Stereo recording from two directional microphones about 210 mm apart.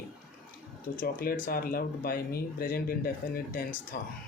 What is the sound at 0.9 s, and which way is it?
Speech, 45° left (ahead or behind).